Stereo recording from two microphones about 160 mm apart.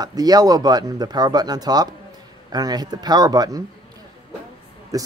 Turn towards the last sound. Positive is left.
turn(degrees=-20)  # may be behind; listen again after turning